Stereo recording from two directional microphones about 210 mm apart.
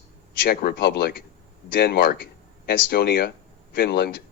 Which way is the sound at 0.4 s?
50° left (ahead or behind).